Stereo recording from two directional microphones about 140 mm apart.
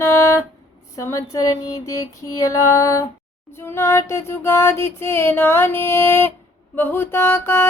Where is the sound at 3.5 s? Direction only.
15° left (ahead or behind).